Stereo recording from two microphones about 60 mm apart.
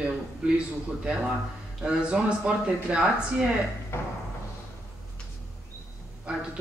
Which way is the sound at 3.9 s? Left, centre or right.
Left.